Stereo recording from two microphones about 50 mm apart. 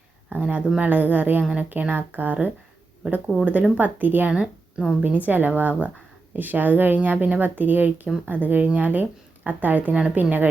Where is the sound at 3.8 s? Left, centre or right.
Right.